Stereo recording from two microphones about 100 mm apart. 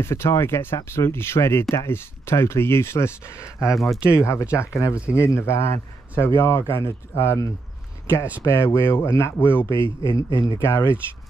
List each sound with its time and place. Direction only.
0.0 s speech: 25° left (ahead or behind)
3.7 s speech: centre (ahead or behind)
4.1 s speech: 30° left (ahead or behind)
9.8 s speech: 55° right (ahead or behind)
10.6 s speech: 25° left (ahead or behind)